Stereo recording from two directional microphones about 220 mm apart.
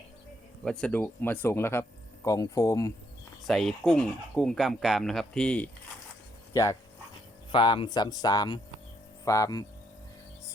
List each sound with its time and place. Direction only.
0.6 s speech: 5° left (ahead or behind)
3.4 s speech: centre (ahead or behind); by 9.6 s 15° left (ahead or behind)